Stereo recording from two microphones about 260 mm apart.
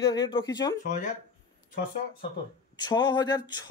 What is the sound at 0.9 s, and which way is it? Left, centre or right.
Speech, left.